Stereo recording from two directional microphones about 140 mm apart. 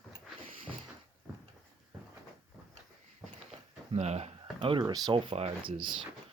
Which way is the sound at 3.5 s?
50° right (ahead or behind).